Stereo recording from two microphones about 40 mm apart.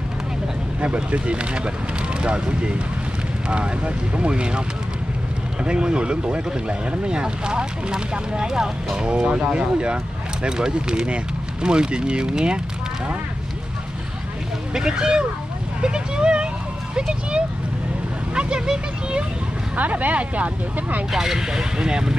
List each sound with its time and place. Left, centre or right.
0.7 s speech: right
14.7 s speech: centre
15.8 s vehicle: right
18.3 s vehicle: right
19.7 s speech: right
21.1 s speech: centre